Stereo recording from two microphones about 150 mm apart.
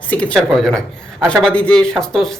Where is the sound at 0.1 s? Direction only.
10° left (ahead or behind).